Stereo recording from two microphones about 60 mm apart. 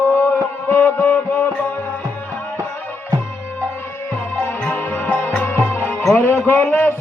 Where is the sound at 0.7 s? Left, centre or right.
Left.